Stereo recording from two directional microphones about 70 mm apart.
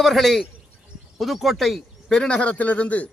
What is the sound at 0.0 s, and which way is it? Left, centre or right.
Speech, centre.